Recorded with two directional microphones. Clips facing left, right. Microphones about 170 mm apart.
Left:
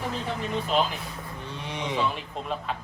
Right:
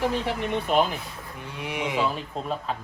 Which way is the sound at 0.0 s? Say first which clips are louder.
Right 5 dB; 75° right (ahead or behind).